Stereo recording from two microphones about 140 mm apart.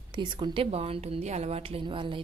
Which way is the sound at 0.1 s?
35° right (ahead or behind).